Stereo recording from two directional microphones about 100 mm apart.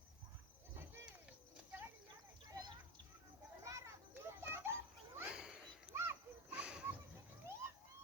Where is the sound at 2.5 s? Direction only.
40° right (ahead or behind).